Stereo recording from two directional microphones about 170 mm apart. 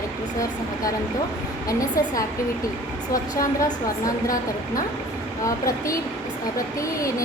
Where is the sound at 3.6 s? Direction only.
20° left (ahead or behind).